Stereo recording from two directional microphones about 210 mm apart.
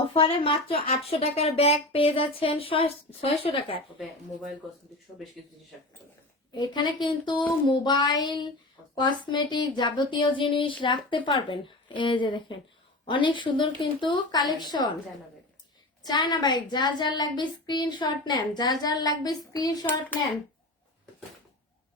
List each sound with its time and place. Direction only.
0.1 s a woman's voice: 25° left (ahead or behind)
6.6 s a woman's voice: 20° left (ahead or behind)
16.0 s a woman's voice: 20° left (ahead or behind)